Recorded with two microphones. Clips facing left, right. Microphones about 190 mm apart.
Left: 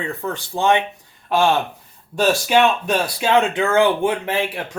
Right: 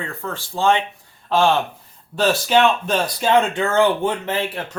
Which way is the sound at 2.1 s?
10° left (ahead or behind).